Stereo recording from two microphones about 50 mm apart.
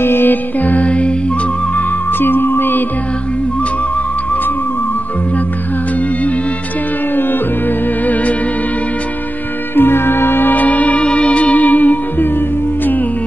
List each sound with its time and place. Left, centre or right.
0.0 s music: left
2.1 s music: left
9.8 s music: left
10.5 s music: left